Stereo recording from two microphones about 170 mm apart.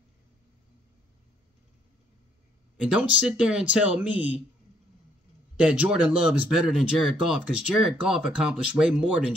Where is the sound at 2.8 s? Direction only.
5° right (ahead or behind).